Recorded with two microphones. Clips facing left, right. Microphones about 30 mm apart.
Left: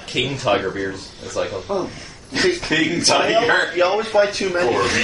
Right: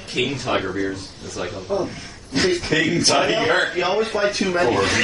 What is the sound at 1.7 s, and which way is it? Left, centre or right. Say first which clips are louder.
A man's voice: even; left.